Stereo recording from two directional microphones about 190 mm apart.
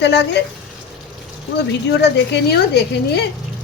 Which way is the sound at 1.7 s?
60° left (ahead or behind).